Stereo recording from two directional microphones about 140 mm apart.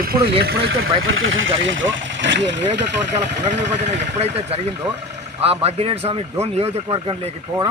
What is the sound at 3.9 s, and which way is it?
Speech, 50° right (ahead or behind).